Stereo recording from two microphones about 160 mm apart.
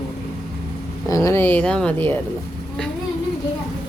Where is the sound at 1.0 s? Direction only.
20° left (ahead or behind).